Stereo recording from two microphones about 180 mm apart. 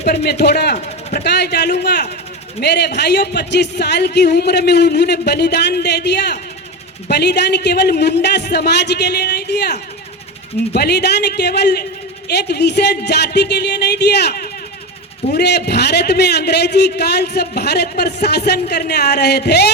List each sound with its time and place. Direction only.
0.1 s a man's voice: 65° left (ahead or behind)
10.8 s a man's voice: 65° left (ahead or behind)